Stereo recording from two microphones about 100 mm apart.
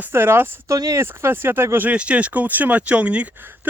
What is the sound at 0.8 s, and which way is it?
Speech, 35° right (ahead or behind).